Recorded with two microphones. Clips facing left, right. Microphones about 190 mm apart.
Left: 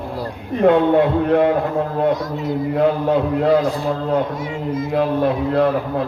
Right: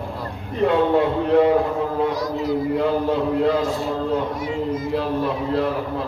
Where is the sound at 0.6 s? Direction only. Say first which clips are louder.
Left 4 dB; 55° left (ahead or behind).